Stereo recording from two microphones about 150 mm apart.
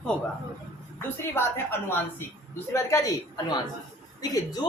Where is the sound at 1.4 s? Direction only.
15° left (ahead or behind).